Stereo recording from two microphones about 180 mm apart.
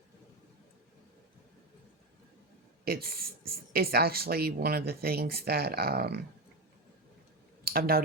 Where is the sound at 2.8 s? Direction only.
60° right (ahead or behind).